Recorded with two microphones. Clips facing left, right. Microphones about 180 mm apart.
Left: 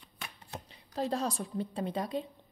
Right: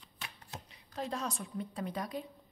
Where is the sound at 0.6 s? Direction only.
35° left (ahead or behind).